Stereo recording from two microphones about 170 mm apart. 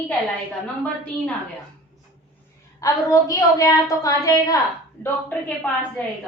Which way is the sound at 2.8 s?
20° left (ahead or behind).